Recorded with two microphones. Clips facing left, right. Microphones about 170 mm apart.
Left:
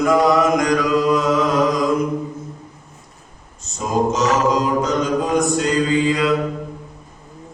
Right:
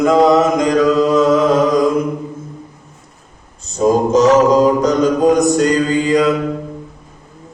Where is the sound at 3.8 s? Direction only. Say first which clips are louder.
Right 7 dB; 35° right (ahead or behind).